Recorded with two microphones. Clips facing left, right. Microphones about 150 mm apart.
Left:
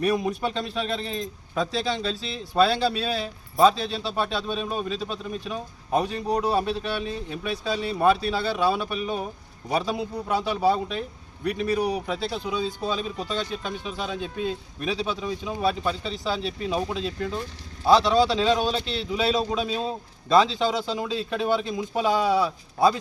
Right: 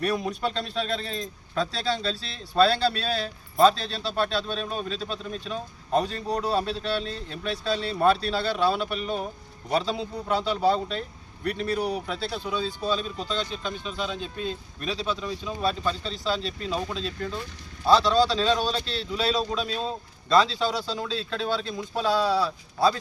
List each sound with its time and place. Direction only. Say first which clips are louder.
0.8 s speech: even; 15° left (ahead or behind)